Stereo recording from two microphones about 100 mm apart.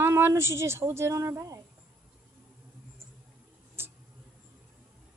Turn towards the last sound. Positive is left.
turn(degrees=-25)  # may be behind; listen again after turning